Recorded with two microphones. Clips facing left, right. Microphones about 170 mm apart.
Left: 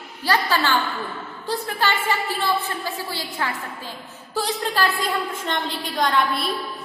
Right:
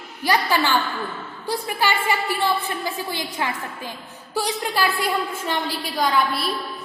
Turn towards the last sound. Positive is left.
turn(degrees=-5)  # may be behind; listen again after turning